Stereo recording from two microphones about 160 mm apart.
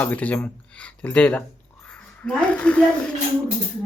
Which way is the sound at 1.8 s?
5° left (ahead or behind).